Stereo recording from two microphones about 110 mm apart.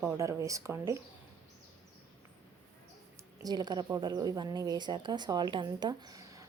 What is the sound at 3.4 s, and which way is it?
A woman's voice, 40° right (ahead or behind).